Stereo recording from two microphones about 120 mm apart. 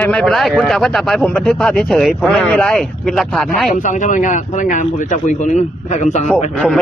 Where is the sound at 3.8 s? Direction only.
90° left.